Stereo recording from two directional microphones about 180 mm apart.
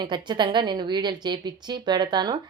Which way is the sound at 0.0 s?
25° right (ahead or behind).